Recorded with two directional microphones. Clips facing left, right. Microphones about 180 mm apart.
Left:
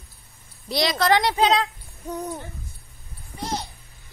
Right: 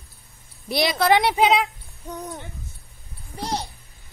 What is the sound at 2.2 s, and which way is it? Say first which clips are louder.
Hoot: left 2 dB; centre (ahead or behind).